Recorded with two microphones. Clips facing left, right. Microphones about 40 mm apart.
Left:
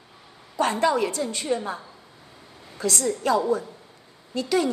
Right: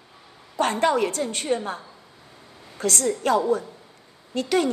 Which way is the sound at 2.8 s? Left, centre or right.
Right.